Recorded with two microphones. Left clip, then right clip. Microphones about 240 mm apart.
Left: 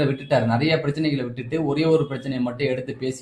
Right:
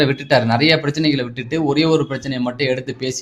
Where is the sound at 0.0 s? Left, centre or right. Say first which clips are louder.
Right 6 dB; right.